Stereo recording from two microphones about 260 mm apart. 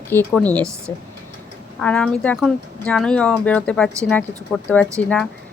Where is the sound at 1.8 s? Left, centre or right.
Centre.